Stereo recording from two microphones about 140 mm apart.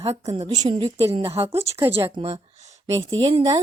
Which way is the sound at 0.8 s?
50° right (ahead or behind).